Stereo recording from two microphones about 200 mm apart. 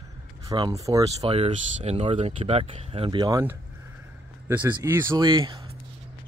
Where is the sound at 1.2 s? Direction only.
30° right (ahead or behind).